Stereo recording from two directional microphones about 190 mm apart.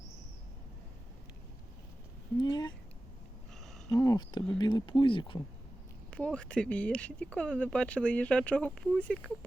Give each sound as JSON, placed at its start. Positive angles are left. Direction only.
{"t": 2.4, "sound": "speech", "side_deg": 20}
{"t": 3.9, "sound": "speech", "side_deg": 20}
{"t": 6.1, "sound": "speech", "side_deg": 5}